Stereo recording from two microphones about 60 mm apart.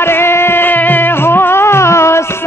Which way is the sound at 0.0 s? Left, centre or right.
Left.